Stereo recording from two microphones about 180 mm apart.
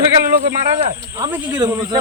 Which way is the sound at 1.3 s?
10° right (ahead or behind).